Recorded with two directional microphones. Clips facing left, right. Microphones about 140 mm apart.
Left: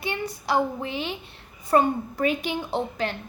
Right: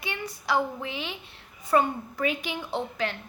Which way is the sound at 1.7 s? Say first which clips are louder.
Left 3 dB; 40° left (ahead or behind).